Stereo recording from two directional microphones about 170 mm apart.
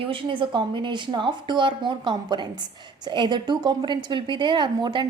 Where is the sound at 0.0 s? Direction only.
30° right (ahead or behind).